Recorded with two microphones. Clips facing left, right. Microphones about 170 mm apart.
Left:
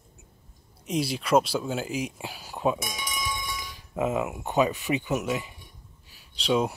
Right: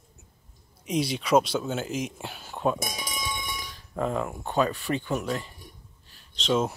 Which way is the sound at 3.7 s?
5° left (ahead or behind).